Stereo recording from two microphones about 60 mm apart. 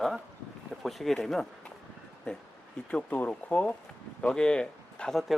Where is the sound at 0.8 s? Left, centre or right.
Centre.